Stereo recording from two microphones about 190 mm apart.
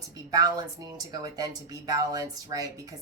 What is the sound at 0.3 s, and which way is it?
Speech, 20° right (ahead or behind).